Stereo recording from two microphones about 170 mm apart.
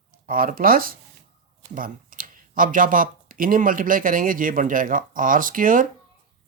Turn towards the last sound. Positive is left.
turn(degrees=-50)  # may be behind; listen again after turning